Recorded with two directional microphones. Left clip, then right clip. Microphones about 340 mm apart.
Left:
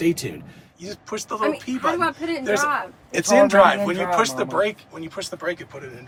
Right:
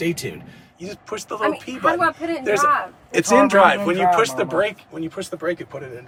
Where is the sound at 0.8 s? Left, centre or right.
Centre.